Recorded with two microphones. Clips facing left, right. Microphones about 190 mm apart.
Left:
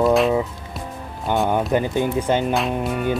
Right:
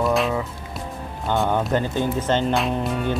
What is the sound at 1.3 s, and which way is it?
Speech, 15° left (ahead or behind).